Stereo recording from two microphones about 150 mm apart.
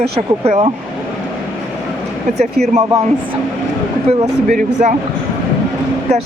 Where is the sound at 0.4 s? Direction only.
45° right (ahead or behind).